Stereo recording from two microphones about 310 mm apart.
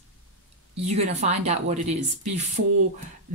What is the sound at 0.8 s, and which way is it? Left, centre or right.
Speech, right.